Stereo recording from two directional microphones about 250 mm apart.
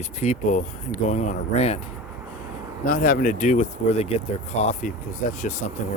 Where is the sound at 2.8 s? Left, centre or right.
Left.